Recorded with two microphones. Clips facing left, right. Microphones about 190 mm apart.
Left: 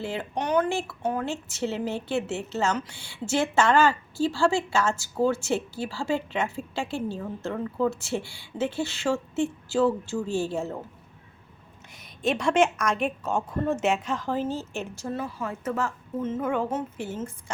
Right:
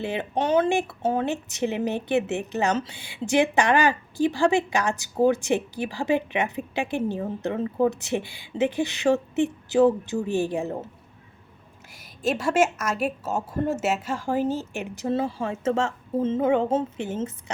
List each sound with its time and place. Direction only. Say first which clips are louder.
0.0 s speech: right 4 dB; 20° right (ahead or behind)
11.9 s a woman's voice: right 1 dB; 5° right (ahead or behind); by 17.2 s 25° right (ahead or behind)